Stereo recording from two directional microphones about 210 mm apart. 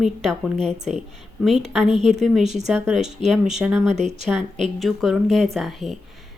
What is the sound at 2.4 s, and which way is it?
Speech, 35° right (ahead or behind).